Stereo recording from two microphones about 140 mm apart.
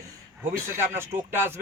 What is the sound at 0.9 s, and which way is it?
Speech, 15° right (ahead or behind).